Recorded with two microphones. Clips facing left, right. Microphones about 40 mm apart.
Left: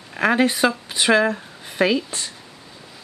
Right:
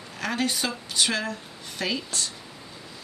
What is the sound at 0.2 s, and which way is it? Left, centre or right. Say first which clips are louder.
Speech: left 10 dB; left.